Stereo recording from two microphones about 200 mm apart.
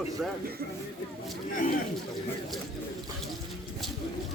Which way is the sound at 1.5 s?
45° left (ahead or behind).